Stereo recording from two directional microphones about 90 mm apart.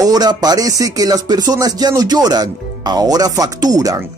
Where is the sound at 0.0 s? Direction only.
45° right (ahead or behind).